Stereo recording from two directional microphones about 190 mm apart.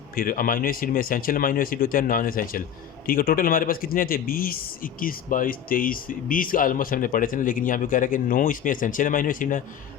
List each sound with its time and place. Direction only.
0.2 s speech: 50° left (ahead or behind)